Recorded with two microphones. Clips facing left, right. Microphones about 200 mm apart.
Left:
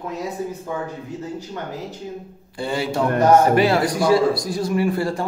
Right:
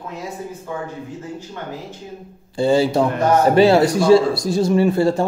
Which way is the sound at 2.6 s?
30° right (ahead or behind).